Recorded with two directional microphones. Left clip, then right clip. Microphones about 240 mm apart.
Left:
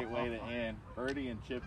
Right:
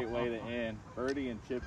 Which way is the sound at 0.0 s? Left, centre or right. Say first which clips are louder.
Right 2 dB; left.